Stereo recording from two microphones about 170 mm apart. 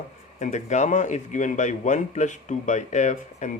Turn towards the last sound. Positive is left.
turn(degrees=45)  # may be behind; listen again after turning